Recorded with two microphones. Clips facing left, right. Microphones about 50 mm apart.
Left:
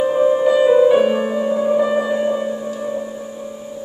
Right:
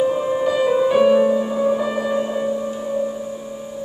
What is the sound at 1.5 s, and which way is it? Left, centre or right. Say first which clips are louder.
Music: left 3 dB; centre.